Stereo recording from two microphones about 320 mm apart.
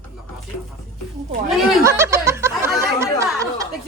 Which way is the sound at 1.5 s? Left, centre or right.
Centre.